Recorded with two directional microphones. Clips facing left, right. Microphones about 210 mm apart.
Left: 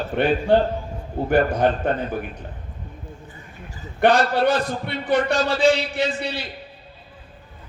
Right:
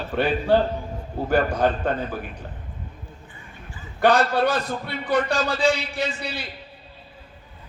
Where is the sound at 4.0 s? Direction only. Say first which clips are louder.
Left 1 dB; 25° left (ahead or behind).